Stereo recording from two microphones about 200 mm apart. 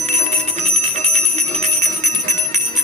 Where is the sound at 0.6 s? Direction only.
30° right (ahead or behind).